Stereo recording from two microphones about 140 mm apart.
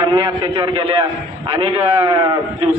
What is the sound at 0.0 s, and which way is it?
A man's voice, 35° right (ahead or behind).